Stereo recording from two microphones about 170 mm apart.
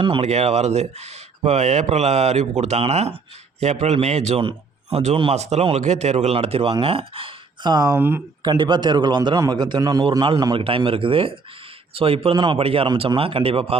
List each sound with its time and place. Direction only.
0.0 s a man's voice: 35° right (ahead or behind)
7.9 s speech: 10° right (ahead or behind)
8.4 s a man's voice: 25° right (ahead or behind)